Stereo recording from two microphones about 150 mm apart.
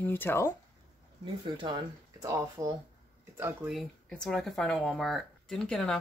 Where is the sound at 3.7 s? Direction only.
Centre (ahead or behind).